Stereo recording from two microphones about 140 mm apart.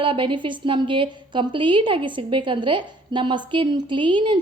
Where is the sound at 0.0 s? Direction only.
35° right (ahead or behind).